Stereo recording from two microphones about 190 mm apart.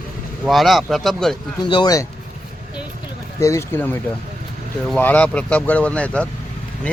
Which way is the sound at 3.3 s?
15° left (ahead or behind).